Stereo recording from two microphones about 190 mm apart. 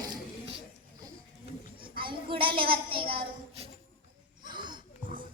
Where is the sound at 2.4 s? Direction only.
25° right (ahead or behind).